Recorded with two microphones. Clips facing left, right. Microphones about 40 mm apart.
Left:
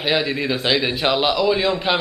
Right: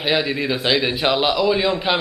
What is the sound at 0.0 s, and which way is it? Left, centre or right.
A man's voice, centre.